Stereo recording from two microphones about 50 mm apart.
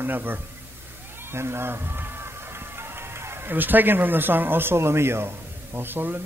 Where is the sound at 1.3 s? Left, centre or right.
Right.